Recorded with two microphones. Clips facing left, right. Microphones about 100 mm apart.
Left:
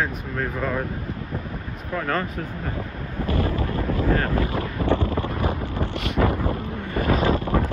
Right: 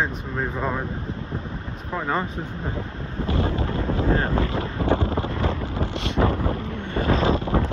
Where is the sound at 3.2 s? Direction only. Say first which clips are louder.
Even; 25° right (ahead or behind).